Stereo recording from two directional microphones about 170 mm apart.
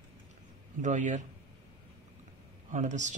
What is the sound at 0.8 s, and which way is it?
Speech, 45° right (ahead or behind).